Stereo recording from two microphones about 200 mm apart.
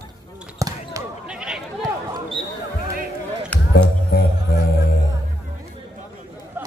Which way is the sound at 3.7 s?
55° left (ahead or behind).